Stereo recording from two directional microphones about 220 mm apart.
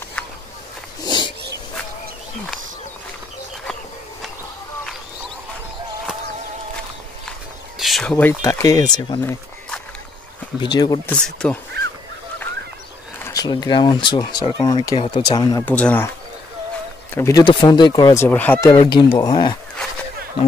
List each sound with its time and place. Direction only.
1.0 s a sound: 20° left (ahead or behind)
7.8 s speech: centre (ahead or behind); by 11.0 s 20° left (ahead or behind)
11.1 s speech: 5° left (ahead or behind)
11.7 s goose: 45° right (ahead or behind)
13.2 s speech: 15° left (ahead or behind)
17.1 s speech: 15° left (ahead or behind)
18.7 s speech: 20° left (ahead or behind)